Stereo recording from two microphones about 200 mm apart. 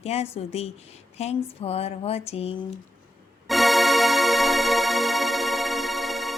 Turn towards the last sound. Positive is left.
turn(degrees=0)  # may be behind; listen again after turning